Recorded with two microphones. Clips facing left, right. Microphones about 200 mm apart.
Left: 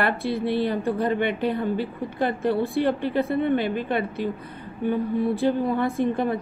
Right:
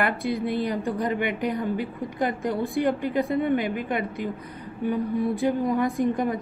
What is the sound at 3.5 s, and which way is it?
Speech, 30° left (ahead or behind).